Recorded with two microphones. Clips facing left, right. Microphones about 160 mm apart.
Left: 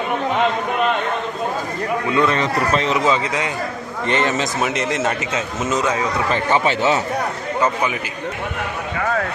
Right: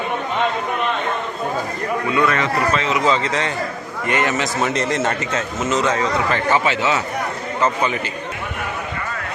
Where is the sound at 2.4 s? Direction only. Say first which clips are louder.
Left 1 dB; 35° left (ahead or behind).